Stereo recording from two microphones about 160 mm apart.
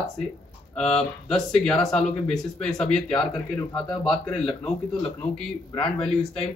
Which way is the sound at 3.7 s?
25° left (ahead or behind).